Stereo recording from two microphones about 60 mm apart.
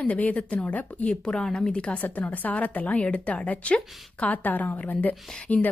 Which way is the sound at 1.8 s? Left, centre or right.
Left.